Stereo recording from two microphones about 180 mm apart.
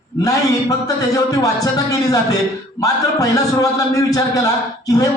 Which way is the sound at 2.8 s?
20° left (ahead or behind).